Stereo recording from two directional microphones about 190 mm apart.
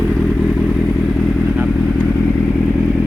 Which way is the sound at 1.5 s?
5° right (ahead or behind).